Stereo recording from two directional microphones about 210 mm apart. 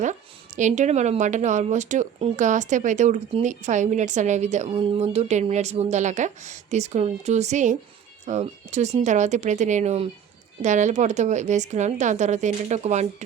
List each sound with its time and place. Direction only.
0.0 s speech: 35° right (ahead or behind)